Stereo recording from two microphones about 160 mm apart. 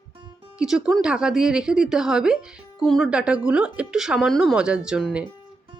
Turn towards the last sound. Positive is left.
turn(degrees=-5)  # may be behind; listen again after turning